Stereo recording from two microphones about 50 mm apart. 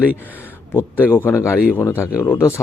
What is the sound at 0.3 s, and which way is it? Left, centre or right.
Speech, left.